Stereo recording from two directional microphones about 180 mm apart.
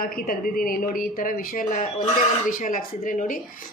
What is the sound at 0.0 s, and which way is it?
Speech, 55° left (ahead or behind).